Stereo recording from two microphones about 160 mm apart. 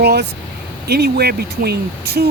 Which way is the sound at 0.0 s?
80° right.